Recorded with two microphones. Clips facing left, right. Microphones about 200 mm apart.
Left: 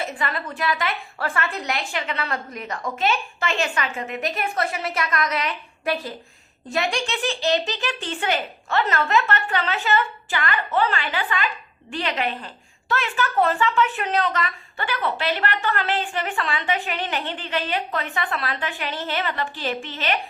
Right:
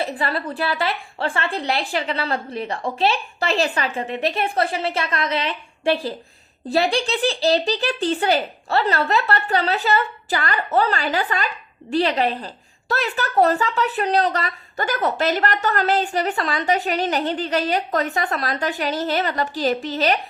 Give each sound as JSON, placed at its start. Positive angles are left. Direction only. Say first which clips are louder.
{"t": 0.0, "sound": "a woman's voice", "louder": "right 4 dB", "side_deg": -35}